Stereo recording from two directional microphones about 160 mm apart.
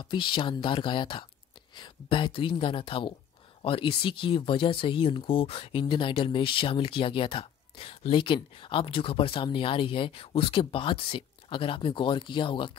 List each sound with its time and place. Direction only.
0.0 s speech: 30° left (ahead or behind)